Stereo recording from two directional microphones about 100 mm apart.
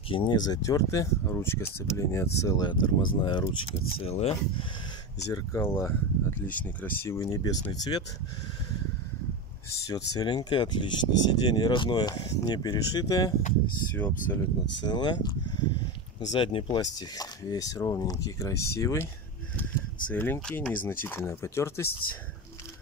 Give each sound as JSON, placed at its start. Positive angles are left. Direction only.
{"t": 0.1, "sound": "speech", "side_deg": 50}
{"t": 4.0, "sound": "speech", "side_deg": 90}
{"t": 5.2, "sound": "speech", "side_deg": 35}
{"t": 7.1, "sound": "speech", "side_deg": 35}
{"t": 9.8, "sound": "speech", "side_deg": 40}
{"t": 13.9, "sound": "speech", "side_deg": 15}
{"t": 14.8, "sound": "speech", "side_deg": 50}
{"t": 16.8, "sound": "speech", "side_deg": 40}
{"t": 20.1, "sound": "speech", "side_deg": 20}